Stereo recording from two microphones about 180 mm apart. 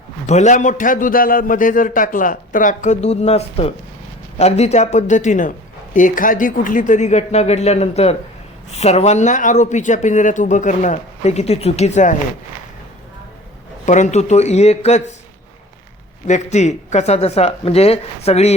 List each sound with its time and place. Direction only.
0.3 s a man's voice: 40° left (ahead or behind)
13.8 s speech: 40° left (ahead or behind)
16.2 s speech: 40° left (ahead or behind)